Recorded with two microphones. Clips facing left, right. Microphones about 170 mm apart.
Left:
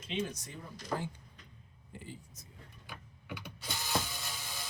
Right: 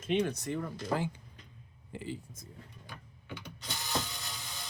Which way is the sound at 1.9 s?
90° right.